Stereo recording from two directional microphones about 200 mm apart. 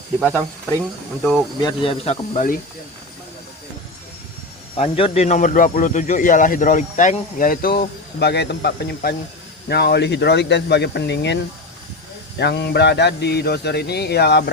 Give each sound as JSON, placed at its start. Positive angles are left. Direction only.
{"t": 0.3, "sound": "speech", "side_deg": 10}
{"t": 1.6, "sound": "speech", "side_deg": 25}
{"t": 4.8, "sound": "speech", "side_deg": 30}
{"t": 12.4, "sound": "speech", "side_deg": 55}